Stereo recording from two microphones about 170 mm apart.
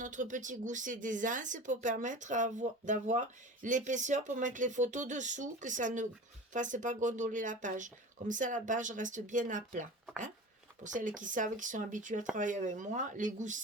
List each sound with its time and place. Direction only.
0.0 s speech: 50° right (ahead or behind)
10.8 s speech: 50° right (ahead or behind)